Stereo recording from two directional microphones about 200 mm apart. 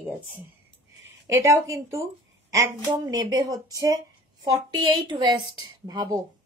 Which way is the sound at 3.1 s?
20° right (ahead or behind).